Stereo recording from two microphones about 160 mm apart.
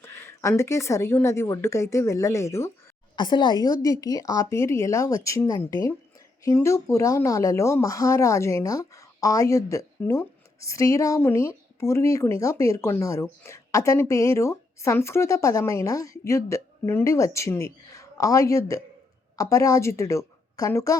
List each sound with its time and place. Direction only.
0.0 s speech: 15° left (ahead or behind)
3.2 s speech: 30° left (ahead or behind)